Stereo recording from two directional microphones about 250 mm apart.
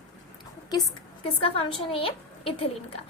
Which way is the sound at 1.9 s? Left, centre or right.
Left.